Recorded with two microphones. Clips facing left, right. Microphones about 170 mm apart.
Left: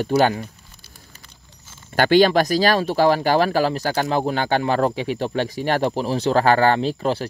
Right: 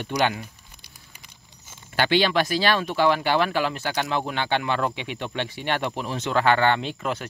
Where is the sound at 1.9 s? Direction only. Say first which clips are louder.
Left 6 dB; 45° left (ahead or behind).